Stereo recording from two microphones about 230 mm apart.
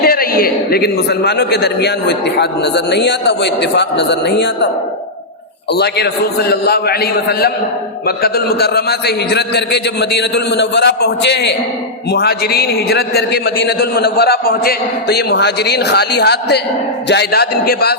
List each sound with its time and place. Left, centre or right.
0.0 s a man's voice: left
5.7 s a man's voice: left